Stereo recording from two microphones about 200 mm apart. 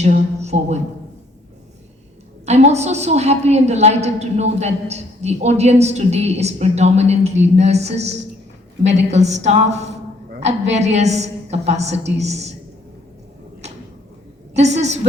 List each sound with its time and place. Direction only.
0.0 s a sound: 35° right (ahead or behind)
2.5 s a woman's voice: 35° right (ahead or behind)
14.5 s a woman's voice: 35° right (ahead or behind)